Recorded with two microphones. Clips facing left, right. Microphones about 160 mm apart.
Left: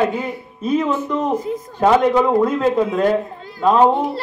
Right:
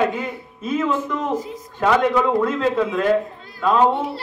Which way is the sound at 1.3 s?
55° left (ahead or behind).